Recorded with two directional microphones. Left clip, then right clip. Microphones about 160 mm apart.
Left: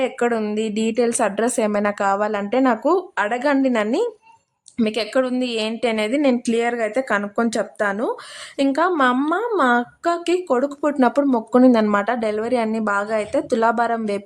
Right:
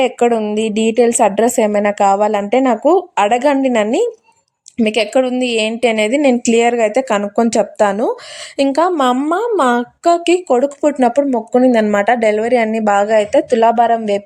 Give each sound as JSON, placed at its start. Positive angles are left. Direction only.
{"t": 0.0, "sound": "a woman's voice", "side_deg": -20}